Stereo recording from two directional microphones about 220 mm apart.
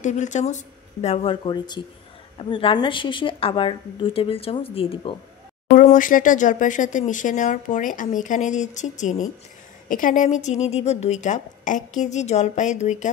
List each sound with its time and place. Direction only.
0.0 s a woman's voice: 35° left (ahead or behind)
5.8 s speech: 35° left (ahead or behind)